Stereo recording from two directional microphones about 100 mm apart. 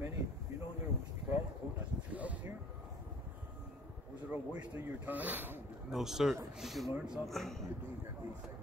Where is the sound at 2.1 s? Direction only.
15° right (ahead or behind).